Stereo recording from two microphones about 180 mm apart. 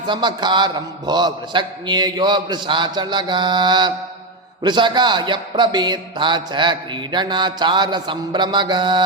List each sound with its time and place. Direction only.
0.0 s a man's voice: 25° right (ahead or behind)